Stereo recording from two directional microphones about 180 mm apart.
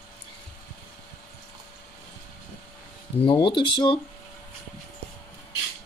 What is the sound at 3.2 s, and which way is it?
Speech, 25° left (ahead or behind).